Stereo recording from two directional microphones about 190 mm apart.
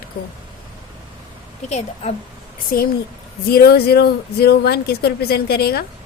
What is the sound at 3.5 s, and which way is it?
Speech, 55° left (ahead or behind).